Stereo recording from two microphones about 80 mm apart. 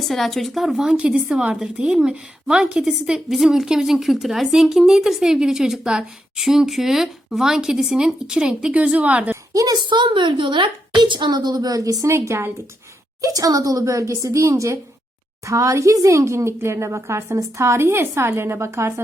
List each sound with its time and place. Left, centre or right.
0.0 s speech: centre
9.5 s a woman's voice: right
9.7 s a woman's voice: right
12.1 s a woman's voice: right
13.2 s a woman's voice: right